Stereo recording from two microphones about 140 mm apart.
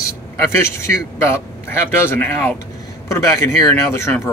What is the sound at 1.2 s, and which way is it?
A man's voice, 15° left (ahead or behind).